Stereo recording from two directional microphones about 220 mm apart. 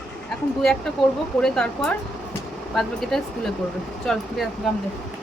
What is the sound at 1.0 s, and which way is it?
Speech, centre (ahead or behind).